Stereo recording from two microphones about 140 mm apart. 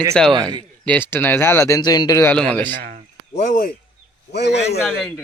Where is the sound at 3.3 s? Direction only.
65° left (ahead or behind).